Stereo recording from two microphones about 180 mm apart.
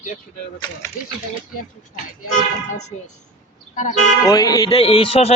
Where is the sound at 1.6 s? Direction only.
50° left (ahead or behind).